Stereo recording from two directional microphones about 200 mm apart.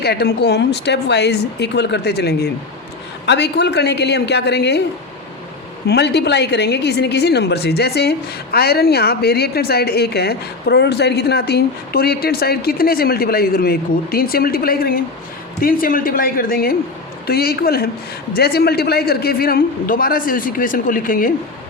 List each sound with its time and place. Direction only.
0.0 s speech: 55° left (ahead or behind)
5.9 s a woman's voice: 55° left (ahead or behind)